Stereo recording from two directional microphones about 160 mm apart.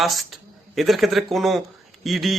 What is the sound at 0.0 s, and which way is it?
A man's voice, centre (ahead or behind).